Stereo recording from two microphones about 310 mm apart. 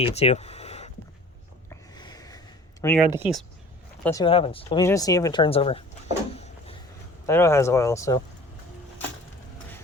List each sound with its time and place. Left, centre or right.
0.0 s speech: centre
1.7 s a sound: centre
2.8 s speech: centre
4.0 s speech: centre
7.3 s speech: centre